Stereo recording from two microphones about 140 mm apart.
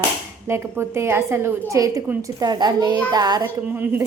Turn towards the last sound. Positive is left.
turn(degrees=-15)  # may be behind; listen again after turning